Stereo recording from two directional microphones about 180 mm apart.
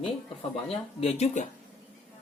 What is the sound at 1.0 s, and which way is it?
Speech, 35° left (ahead or behind).